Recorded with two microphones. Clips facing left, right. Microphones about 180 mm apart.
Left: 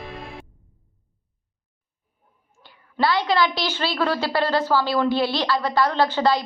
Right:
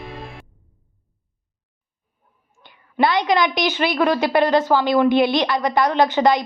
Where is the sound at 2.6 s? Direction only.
20° right (ahead or behind).